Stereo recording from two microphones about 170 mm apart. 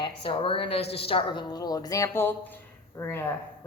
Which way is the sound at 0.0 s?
30° left (ahead or behind).